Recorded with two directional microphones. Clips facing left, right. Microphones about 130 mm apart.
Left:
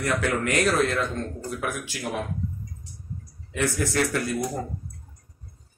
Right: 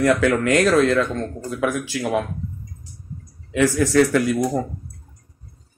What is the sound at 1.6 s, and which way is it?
Speech, 90° right.